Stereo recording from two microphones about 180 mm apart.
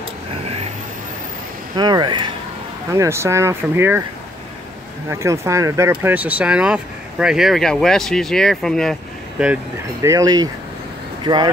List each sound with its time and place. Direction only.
1.8 s speech: 25° right (ahead or behind)
2.9 s speech: 15° right (ahead or behind)
5.1 s speech: 15° right (ahead or behind); by 8.9 s 5° left (ahead or behind)
10.0 s speech: 20° right (ahead or behind)